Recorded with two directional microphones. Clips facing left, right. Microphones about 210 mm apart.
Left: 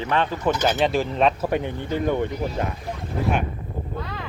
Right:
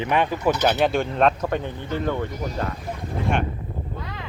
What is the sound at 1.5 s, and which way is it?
Speech, 15° left (ahead or behind).